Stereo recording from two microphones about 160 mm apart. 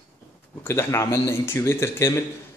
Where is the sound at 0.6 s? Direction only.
15° left (ahead or behind).